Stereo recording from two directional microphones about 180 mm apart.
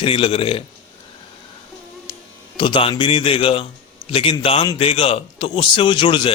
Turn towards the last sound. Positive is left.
turn(degrees=25)  # may be behind; listen again after turning